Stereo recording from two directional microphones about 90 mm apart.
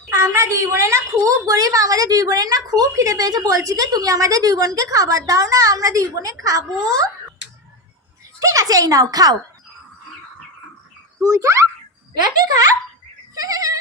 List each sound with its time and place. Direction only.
0.1 s a woman's voice: 30° right (ahead or behind)
8.4 s a woman's voice: 40° right (ahead or behind)
11.2 s a child's voice: 35° right (ahead or behind)
12.2 s speech: 40° right (ahead or behind)
13.3 s goat: 45° right (ahead or behind)